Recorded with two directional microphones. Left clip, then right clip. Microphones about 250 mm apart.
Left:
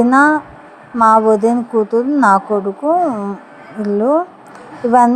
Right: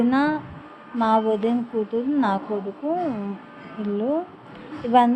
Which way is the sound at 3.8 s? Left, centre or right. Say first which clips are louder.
Left 10 dB; left.